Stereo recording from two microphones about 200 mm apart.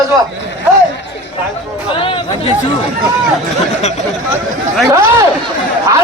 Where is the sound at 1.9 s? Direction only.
25° left (ahead or behind).